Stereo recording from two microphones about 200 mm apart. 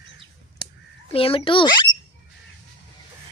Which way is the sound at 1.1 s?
30° left (ahead or behind).